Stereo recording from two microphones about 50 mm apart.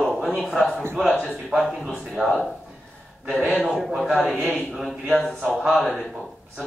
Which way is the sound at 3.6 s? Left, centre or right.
Centre.